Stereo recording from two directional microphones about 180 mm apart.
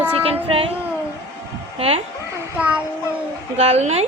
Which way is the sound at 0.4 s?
30° right (ahead or behind).